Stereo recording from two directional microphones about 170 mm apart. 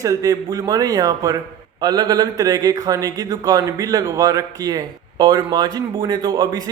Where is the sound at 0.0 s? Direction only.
20° right (ahead or behind).